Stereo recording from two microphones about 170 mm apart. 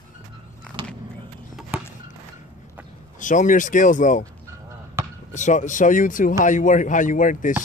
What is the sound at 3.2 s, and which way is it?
A man's voice, 50° left (ahead or behind).